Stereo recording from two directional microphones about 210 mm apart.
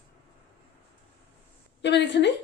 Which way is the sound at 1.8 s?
55° left (ahead or behind).